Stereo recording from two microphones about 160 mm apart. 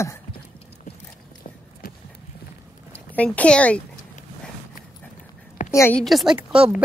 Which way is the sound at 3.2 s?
5° left (ahead or behind).